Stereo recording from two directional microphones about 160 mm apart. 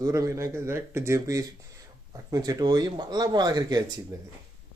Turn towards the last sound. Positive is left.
turn(degrees=-25)  # may be behind; listen again after turning